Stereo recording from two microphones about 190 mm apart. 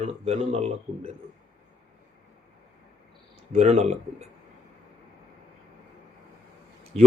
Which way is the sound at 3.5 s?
35° right (ahead or behind).